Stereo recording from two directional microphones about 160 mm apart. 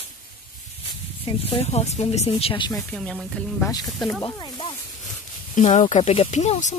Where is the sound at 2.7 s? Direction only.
5° left (ahead or behind).